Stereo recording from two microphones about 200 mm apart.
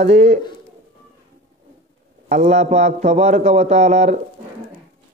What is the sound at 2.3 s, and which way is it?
Speech, 35° right (ahead or behind).